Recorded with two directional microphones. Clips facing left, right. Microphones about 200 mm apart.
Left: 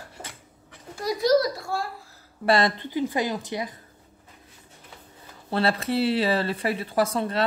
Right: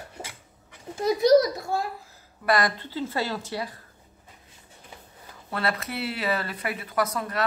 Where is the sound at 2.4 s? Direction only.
25° left (ahead or behind).